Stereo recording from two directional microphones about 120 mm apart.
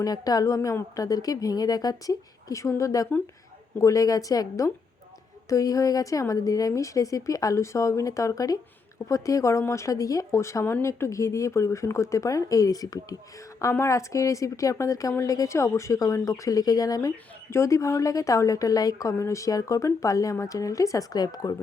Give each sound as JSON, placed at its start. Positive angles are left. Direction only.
{"t": 0.0, "sound": "speech", "side_deg": 30}